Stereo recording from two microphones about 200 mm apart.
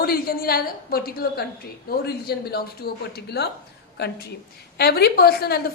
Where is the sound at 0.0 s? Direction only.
50° left (ahead or behind).